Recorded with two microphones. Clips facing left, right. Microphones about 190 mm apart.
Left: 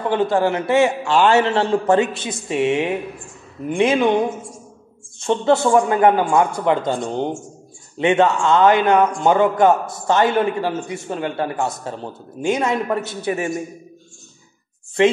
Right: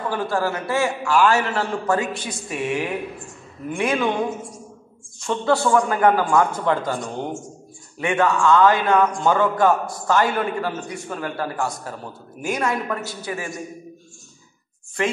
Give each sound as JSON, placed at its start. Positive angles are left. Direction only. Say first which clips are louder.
{"t": 0.0, "sound": "a man's voice", "louder": "left 5 dB", "side_deg": 20}
{"t": 5.2, "sound": "a man's voice", "louder": "left 4 dB", "side_deg": 25}
{"t": 15.0, "sound": "a man's voice", "louder": "left 8 dB", "side_deg": 25}